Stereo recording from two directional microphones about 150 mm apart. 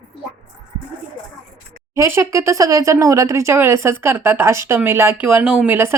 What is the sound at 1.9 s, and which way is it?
Speech, 20° right (ahead or behind).